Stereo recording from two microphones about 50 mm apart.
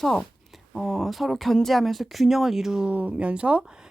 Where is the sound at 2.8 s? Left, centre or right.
Right.